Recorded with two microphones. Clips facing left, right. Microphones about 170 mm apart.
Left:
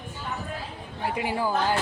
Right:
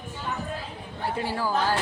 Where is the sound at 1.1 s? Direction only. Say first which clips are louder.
Left 1 dB; 15° left (ahead or behind).